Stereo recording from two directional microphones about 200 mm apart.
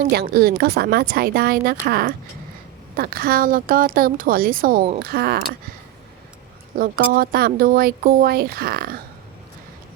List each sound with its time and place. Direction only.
0.1 s speech: 50° right (ahead or behind)
6.7 s speech: 45° right (ahead or behind)